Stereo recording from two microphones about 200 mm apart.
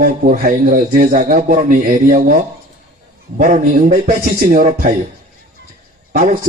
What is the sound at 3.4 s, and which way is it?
Speech, 40° right (ahead or behind).